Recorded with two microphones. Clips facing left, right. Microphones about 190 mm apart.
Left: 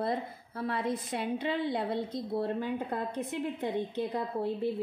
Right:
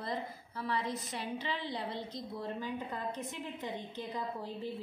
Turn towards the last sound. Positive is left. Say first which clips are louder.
# left 7 dB
turn(degrees=60)  # may be behind; listen again after turning